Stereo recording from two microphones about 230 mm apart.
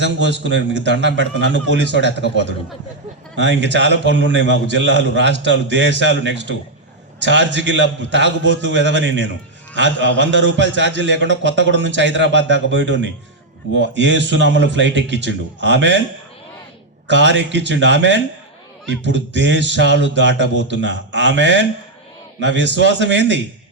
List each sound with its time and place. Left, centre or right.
0.0 s a man's voice: right
3.6 s a man's voice: right
17.1 s a man's voice: right